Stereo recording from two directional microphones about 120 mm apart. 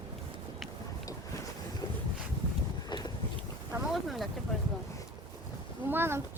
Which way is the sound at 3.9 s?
Centre (ahead or behind).